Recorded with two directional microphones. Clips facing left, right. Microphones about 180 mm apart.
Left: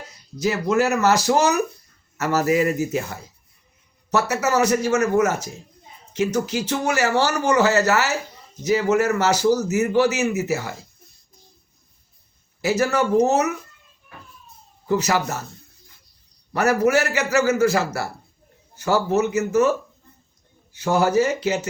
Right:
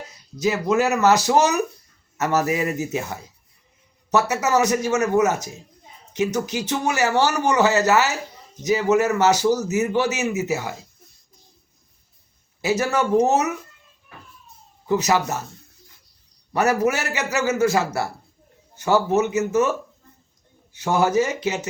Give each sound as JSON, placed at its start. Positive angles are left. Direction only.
{"t": 0.3, "sound": "a man's voice", "side_deg": -20}
{"t": 4.1, "sound": "a man's voice", "side_deg": -20}
{"t": 12.6, "sound": "a man's voice", "side_deg": -25}
{"t": 14.8, "sound": "a man's voice", "side_deg": -20}
{"t": 16.5, "sound": "a man's voice", "side_deg": -20}
{"t": 20.7, "sound": "a man's voice", "side_deg": -20}